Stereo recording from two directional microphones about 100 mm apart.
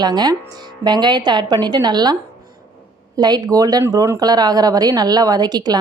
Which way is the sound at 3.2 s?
45° right (ahead or behind).